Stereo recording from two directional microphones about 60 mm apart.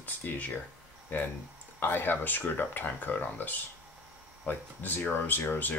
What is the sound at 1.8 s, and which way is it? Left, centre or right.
Speech, left.